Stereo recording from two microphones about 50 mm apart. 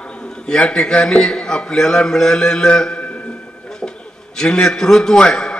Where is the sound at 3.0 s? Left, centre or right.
Left.